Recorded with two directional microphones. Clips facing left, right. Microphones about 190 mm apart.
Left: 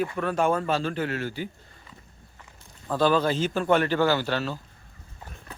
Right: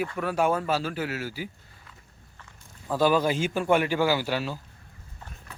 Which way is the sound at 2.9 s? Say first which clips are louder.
Even; 10° right (ahead or behind).